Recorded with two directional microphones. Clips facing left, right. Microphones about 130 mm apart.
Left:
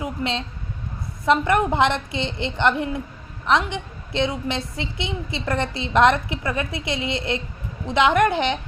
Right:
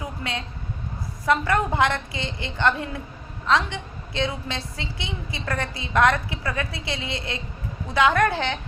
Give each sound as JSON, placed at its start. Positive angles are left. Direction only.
{"t": 0.0, "sound": "a woman's voice", "side_deg": 20}